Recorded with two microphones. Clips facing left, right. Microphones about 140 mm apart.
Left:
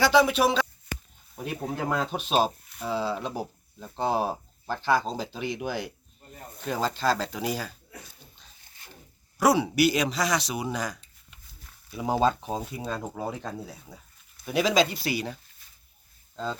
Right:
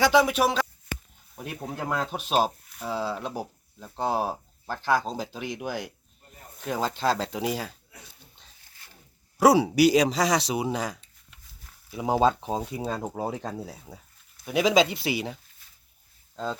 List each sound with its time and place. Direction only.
0.0 s speech: 10° right (ahead or behind)
1.9 s speech: 5° right (ahead or behind); by 12.8 s 20° right (ahead or behind)
12.8 s speech: 35° right (ahead or behind)
14.5 s speech: 20° right (ahead or behind)
16.3 s speech: 10° right (ahead or behind)